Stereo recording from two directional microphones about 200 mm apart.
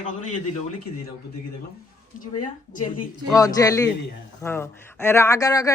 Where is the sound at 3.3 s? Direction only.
15° left (ahead or behind).